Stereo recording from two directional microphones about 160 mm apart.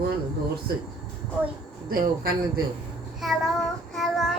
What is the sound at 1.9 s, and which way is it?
Speech, 65° right (ahead or behind).